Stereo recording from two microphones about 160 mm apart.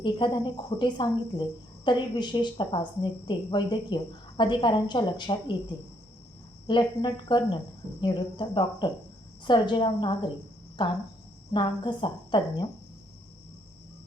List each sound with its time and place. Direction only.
0.0 s speech: 30° left (ahead or behind)
6.7 s speech: 30° left (ahead or behind)